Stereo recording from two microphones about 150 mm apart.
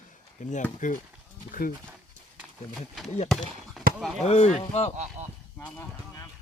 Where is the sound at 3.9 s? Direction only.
75° right (ahead or behind).